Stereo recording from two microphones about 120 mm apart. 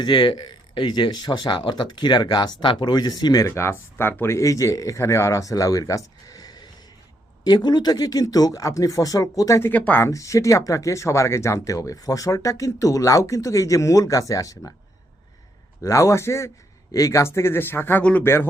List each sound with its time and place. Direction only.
0.0 s speech: 40° left (ahead or behind)
9.6 s speech: 15° left (ahead or behind)
10.1 s speech: 25° left (ahead or behind)
15.8 s speech: 25° left (ahead or behind)